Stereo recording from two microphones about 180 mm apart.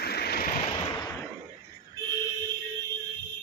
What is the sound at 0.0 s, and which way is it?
Vehicle, 60° left (ahead or behind).